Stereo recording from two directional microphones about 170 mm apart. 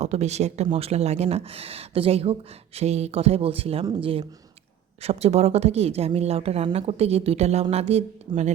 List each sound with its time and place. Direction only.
0.0 s speech: 40° right (ahead or behind)